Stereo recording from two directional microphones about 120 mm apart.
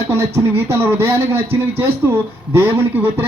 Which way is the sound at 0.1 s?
20° right (ahead or behind).